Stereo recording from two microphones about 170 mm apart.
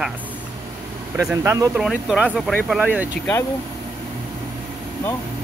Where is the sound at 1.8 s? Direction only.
5° right (ahead or behind).